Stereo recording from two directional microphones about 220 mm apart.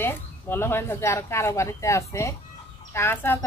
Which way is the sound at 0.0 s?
10° left (ahead or behind).